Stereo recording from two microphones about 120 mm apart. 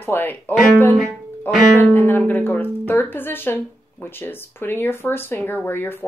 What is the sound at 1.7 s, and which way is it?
Speech, 15° left (ahead or behind).